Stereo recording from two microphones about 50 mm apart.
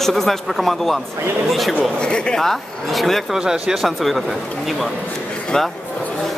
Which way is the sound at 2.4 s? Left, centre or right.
Centre.